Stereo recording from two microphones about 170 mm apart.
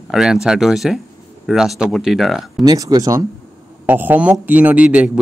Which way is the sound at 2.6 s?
20° right (ahead or behind).